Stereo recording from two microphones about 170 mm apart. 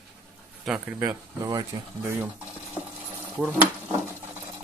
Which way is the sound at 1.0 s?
25° right (ahead or behind).